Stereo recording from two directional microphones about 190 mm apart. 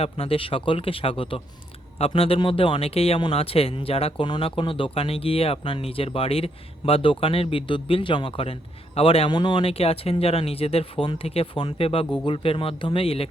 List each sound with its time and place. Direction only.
0.0 s speech: 30° left (ahead or behind)